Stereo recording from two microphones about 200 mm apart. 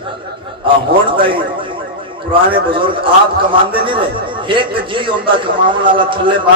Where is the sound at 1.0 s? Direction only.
25° right (ahead or behind).